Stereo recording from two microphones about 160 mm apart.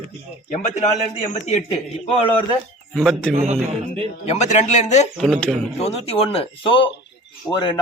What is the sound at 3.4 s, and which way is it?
Speech, 40° right (ahead or behind).